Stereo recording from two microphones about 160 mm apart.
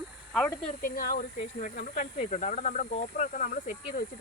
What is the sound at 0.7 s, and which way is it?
Speech, 65° left (ahead or behind).